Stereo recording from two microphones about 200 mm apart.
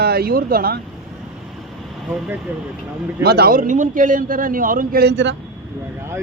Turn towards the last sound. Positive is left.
turn(degrees=-60)  # may be behind; listen again after turning